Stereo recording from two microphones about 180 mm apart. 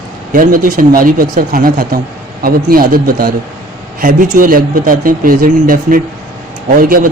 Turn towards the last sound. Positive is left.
turn(degrees=-50)  # may be behind; listen again after turning